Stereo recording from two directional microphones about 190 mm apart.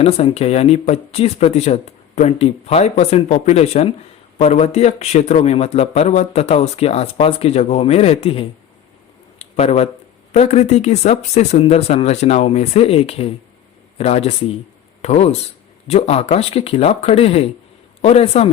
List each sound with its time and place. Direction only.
0.0 s a man's voice: 30° left (ahead or behind)